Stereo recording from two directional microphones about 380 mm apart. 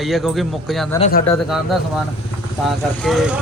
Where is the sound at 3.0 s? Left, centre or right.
Centre.